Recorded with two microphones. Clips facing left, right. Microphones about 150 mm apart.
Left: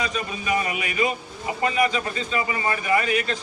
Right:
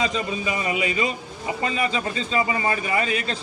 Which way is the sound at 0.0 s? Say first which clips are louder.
Right 3 dB; 25° right (ahead or behind).